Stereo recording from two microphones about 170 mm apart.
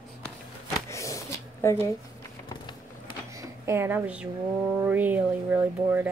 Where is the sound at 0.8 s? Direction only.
20° left (ahead or behind).